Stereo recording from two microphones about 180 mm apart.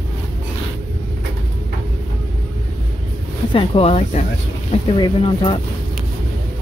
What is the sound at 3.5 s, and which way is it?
Speech, 30° left (ahead or behind).